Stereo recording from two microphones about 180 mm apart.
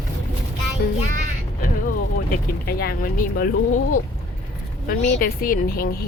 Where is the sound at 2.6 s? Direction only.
60° left (ahead or behind).